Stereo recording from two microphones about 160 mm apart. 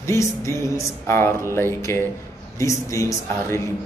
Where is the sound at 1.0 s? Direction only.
15° left (ahead or behind).